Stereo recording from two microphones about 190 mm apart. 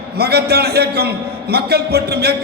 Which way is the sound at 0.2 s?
60° right (ahead or behind).